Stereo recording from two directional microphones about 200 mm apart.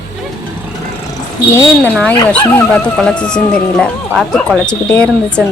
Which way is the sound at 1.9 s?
5° left (ahead or behind).